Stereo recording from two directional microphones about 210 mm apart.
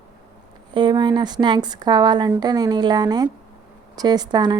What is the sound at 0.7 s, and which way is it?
A woman's voice, 20° right (ahead or behind).